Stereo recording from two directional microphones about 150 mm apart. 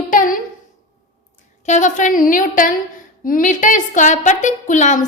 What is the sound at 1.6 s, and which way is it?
A woman's voice, 55° left (ahead or behind).